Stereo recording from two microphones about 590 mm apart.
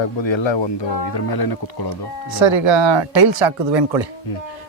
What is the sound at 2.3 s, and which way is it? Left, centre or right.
Speech, right.